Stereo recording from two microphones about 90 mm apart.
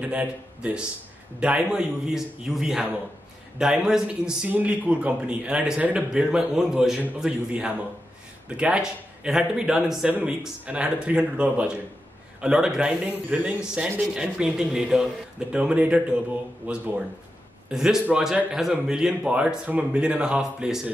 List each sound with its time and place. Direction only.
0.0 s a man's voice: 10° right (ahead or behind)